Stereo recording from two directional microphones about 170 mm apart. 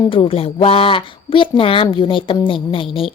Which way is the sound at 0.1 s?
30° left (ahead or behind).